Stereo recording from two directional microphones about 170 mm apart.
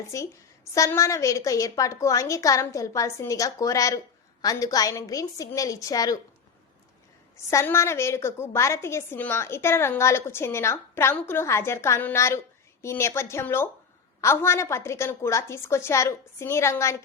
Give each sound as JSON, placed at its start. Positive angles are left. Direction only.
{"t": 0.1, "sound": "a woman's voice", "side_deg": 20}
{"t": 7.5, "sound": "a woman's voice", "side_deg": 15}